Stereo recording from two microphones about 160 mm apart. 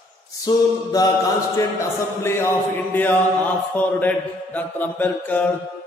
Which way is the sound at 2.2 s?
15° left (ahead or behind).